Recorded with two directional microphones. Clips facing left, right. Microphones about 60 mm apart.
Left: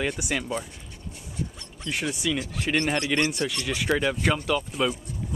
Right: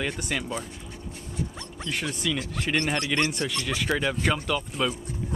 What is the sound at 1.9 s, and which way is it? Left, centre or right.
Speech, centre.